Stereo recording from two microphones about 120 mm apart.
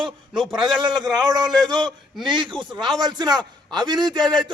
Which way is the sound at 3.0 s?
35° right (ahead or behind).